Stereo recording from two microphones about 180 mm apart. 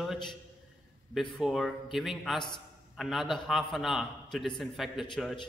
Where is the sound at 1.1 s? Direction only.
Centre (ahead or behind).